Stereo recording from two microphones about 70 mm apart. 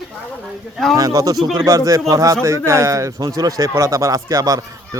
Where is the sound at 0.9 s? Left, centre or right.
Right.